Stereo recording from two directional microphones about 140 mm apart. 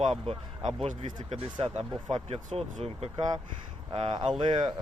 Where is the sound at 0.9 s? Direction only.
65° right (ahead or behind).